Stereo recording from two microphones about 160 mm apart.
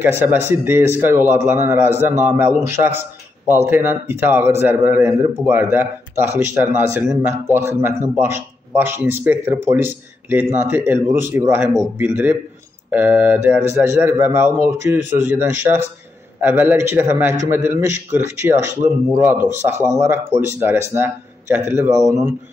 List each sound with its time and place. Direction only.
0.2 s a man's voice: 15° right (ahead or behind)